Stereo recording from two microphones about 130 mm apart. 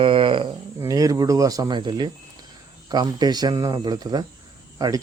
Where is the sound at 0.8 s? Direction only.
25° right (ahead or behind).